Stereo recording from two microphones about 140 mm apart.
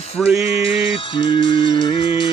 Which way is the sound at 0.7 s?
40° left (ahead or behind).